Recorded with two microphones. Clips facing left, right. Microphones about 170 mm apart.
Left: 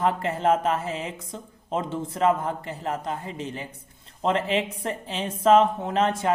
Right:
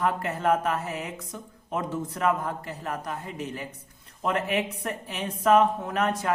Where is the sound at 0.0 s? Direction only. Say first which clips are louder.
Left 3 dB; 25° left (ahead or behind).